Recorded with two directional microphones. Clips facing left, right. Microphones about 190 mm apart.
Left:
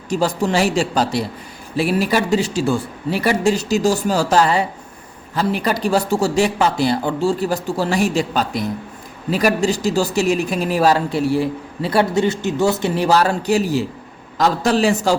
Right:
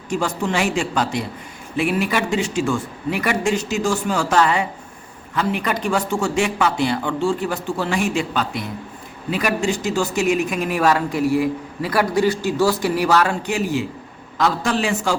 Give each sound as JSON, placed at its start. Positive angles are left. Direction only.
{"t": 0.1, "sound": "speech", "side_deg": 35}